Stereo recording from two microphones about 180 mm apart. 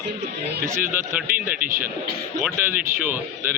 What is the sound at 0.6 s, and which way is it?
Speech, 15° right (ahead or behind).